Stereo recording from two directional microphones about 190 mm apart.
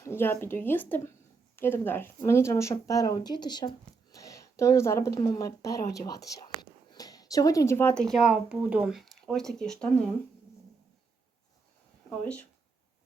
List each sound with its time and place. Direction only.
0.0 s speech: 10° left (ahead or behind)